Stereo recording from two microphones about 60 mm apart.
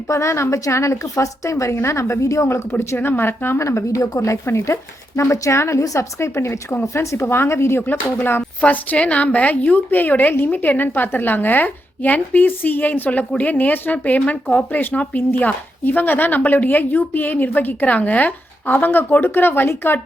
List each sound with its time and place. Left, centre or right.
0.1 s a woman's voice: left
2.7 s speech: left
5.8 s a woman's voice: left
6.1 s a woman's voice: left
7.3 s a woman's voice: left
8.6 s a woman's voice: left